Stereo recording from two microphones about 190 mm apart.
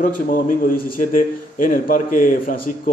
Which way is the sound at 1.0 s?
45° left (ahead or behind).